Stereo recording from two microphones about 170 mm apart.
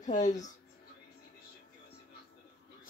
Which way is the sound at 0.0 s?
45° left (ahead or behind).